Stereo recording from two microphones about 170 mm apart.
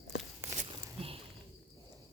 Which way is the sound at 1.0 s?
35° right (ahead or behind).